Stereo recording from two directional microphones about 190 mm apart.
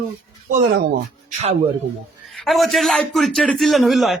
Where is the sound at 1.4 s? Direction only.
35° right (ahead or behind).